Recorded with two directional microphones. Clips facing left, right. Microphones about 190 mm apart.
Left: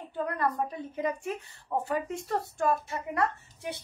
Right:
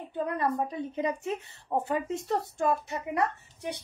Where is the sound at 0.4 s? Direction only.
20° right (ahead or behind).